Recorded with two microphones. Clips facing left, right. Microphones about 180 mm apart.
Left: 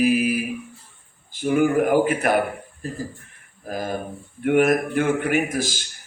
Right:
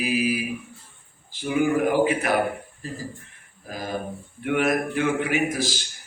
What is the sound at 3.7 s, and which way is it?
A man's voice, 50° left (ahead or behind).